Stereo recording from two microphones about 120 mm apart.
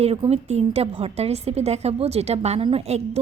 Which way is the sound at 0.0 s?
55° right (ahead or behind).